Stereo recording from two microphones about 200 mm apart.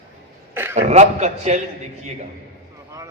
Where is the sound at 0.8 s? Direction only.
35° right (ahead or behind).